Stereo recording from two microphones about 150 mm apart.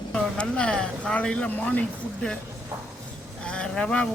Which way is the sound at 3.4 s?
5° left (ahead or behind).